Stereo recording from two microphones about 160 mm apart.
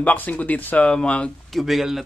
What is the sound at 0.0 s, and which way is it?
Speech, 10° left (ahead or behind).